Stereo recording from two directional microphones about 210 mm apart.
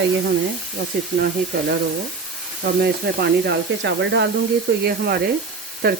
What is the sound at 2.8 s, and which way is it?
Speech, 50° right (ahead or behind).